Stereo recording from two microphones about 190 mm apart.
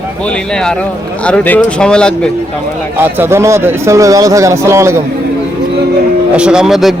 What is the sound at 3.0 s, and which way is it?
Speech, 10° right (ahead or behind).